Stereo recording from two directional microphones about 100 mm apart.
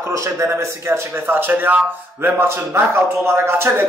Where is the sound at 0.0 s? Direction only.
30° right (ahead or behind).